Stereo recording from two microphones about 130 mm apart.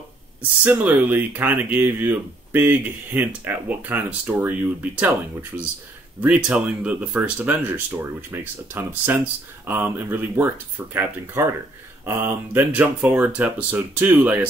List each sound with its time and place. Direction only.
0.7 s speech: 15° right (ahead or behind)